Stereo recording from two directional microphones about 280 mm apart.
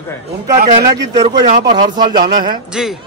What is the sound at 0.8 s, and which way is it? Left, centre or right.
A man's voice, centre.